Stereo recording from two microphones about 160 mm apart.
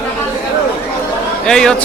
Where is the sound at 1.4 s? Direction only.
5° left (ahead or behind).